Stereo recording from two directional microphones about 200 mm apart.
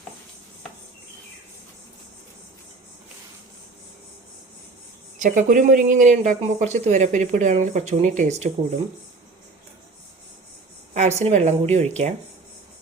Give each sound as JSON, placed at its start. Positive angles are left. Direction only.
{"t": 5.2, "sound": "speech", "side_deg": -40}
{"t": 10.9, "sound": "speech", "side_deg": -35}